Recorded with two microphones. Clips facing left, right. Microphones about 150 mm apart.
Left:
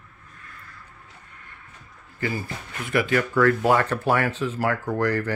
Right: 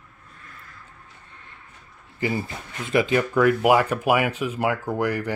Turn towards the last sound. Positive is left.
turn(degrees=-10)  # may be behind; listen again after turning